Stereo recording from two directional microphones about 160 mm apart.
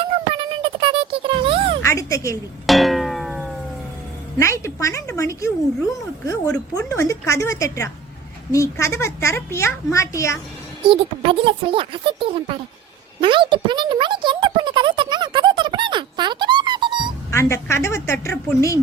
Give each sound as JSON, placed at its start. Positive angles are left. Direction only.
{"t": 0.0, "sound": "a sound", "side_deg": -30}
{"t": 1.8, "sound": "a woman's voice", "side_deg": 20}
{"t": 2.6, "sound": "music", "side_deg": 0}
{"t": 4.4, "sound": "speech", "side_deg": 20}
{"t": 8.5, "sound": "a child's voice", "side_deg": 20}
{"t": 10.8, "sound": "speech", "side_deg": -35}
{"t": 13.2, "sound": "a sound", "side_deg": -30}
{"t": 17.3, "sound": "a child's voice", "side_deg": 15}